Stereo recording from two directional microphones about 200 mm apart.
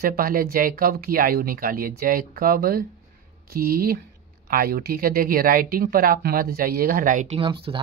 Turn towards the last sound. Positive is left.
turn(degrees=-25)  # may be behind; listen again after turning